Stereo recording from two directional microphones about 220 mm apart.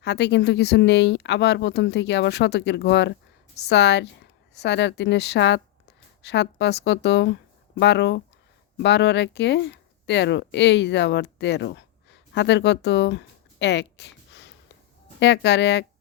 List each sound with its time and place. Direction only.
0.0 s speech: 50° left (ahead or behind)